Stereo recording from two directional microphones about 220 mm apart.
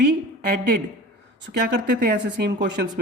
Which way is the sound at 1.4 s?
50° right (ahead or behind).